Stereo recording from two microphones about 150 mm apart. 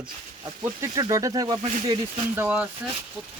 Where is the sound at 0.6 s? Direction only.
20° right (ahead or behind).